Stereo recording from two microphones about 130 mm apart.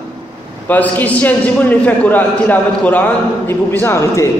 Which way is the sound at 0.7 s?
15° left (ahead or behind).